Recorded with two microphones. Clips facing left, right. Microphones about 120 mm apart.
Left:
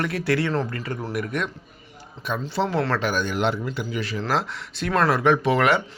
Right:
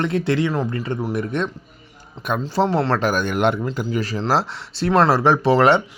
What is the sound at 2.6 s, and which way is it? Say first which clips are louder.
Speech: right 4 dB; 30° right (ahead or behind).